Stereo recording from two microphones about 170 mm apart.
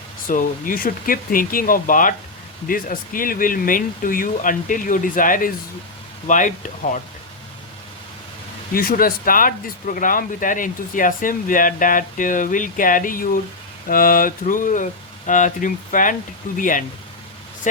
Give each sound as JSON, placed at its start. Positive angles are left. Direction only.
{"t": 0.3, "sound": "speech", "side_deg": 55}
{"t": 8.7, "sound": "speech", "side_deg": 60}